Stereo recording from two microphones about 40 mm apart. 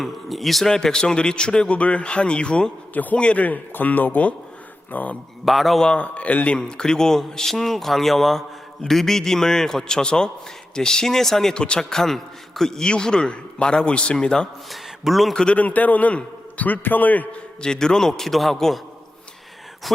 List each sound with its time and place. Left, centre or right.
0.0 s speech: centre
0.7 s a man's voice: centre
2.9 s a man's voice: left
3.2 s a man's voice: left
3.4 s a man's voice: left
5.5 s speech: centre
6.0 s a man's voice: left
6.6 s a man's voice: left
11.5 s a man's voice: left
11.8 s a man's voice: centre
14.7 s speech: centre
15.5 s a man's voice: left
17.6 s a man's voice: centre